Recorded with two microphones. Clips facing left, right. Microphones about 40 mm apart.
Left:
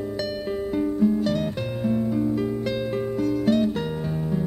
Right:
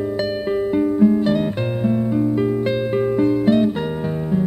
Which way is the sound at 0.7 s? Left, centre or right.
Right.